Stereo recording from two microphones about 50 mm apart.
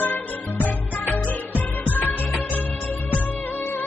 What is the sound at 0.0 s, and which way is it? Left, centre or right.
Music, left.